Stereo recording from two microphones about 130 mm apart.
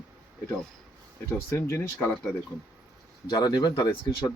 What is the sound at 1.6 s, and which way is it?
Speech, 20° left (ahead or behind).